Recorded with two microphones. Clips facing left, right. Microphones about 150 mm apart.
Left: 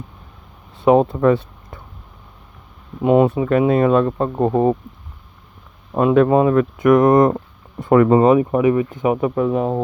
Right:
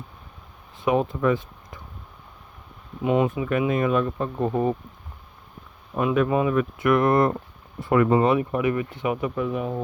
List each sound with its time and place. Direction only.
0.9 s speech: 40° left (ahead or behind)
3.0 s speech: 50° left (ahead or behind)
5.9 s speech: 50° left (ahead or behind)
8.1 s speech: 35° left (ahead or behind)